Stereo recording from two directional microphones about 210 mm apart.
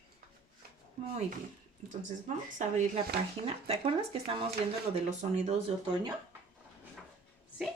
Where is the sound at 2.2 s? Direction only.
35° right (ahead or behind).